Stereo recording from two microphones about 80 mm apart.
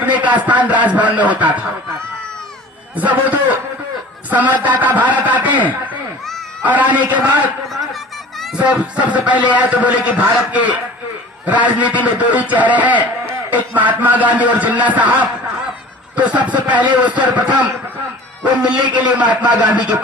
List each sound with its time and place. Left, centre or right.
0.0 s a man's voice: centre
2.9 s a man's voice: centre
6.6 s a man's voice: centre
8.5 s a man's voice: centre
16.1 s speech: centre